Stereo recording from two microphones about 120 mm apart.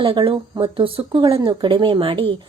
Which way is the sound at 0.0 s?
45° right (ahead or behind).